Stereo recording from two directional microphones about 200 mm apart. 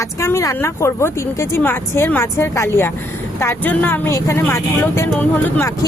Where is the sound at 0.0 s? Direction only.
15° left (ahead or behind).